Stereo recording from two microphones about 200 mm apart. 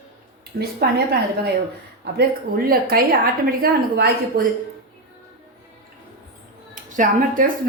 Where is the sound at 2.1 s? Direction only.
55° right (ahead or behind).